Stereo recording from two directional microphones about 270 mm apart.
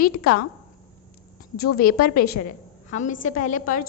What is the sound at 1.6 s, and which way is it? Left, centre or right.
A woman's voice, left.